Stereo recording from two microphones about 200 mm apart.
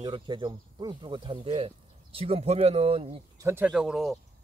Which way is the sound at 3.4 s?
10° right (ahead or behind).